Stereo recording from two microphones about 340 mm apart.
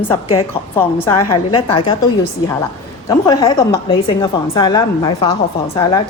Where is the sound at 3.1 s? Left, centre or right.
Centre.